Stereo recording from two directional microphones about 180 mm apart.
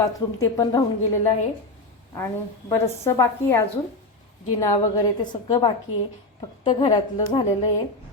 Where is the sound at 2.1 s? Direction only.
15° left (ahead or behind).